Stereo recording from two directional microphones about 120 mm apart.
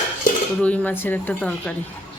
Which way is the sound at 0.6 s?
10° left (ahead or behind).